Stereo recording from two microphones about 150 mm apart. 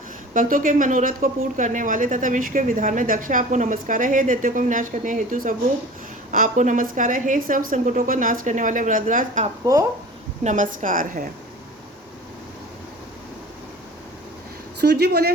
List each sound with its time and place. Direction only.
0.3 s a woman's voice: 60° right (ahead or behind)
14.8 s speech: 90° right